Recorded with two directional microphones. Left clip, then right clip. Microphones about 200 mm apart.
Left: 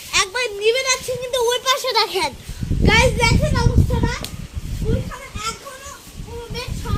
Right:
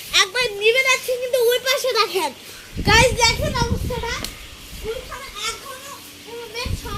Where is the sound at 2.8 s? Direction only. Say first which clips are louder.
Right 1 dB; 50° right (ahead or behind).